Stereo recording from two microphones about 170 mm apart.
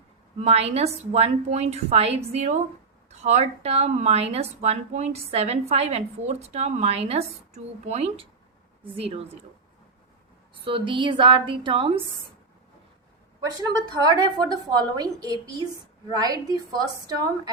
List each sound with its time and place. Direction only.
0.3 s a woman's voice: 35° right (ahead or behind)
10.6 s a woman's voice: 30° right (ahead or behind)
13.4 s a woman's voice: 25° right (ahead or behind)